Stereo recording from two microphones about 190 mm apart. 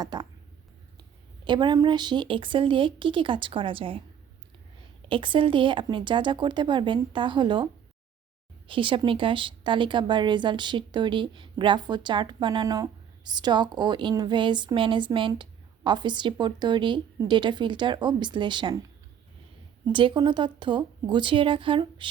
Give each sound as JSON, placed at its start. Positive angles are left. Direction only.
{"t": 0.0, "sound": "a sound", "side_deg": -20}
{"t": 1.5, "sound": "a woman's voice", "side_deg": -25}
{"t": 5.0, "sound": "a woman's voice", "side_deg": -25}
{"t": 19.9, "sound": "a woman's voice", "side_deg": -25}